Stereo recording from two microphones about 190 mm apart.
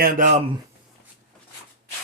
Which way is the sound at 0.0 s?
45° right (ahead or behind).